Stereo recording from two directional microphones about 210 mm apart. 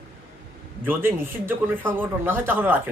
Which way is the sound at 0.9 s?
10° right (ahead or behind).